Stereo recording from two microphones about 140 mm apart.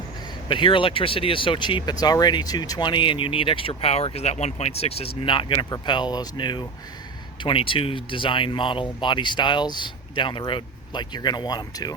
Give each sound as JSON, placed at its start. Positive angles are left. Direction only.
{"t": 0.4, "sound": "speech", "side_deg": 35}